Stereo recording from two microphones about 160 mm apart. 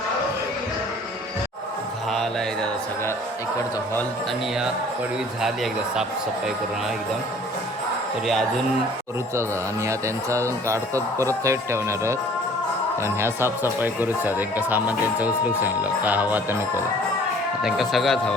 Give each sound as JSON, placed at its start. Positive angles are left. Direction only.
{"t": 8.3, "sound": "speech", "side_deg": 0}
{"t": 9.8, "sound": "speech", "side_deg": -20}
{"t": 17.6, "sound": "speech", "side_deg": 0}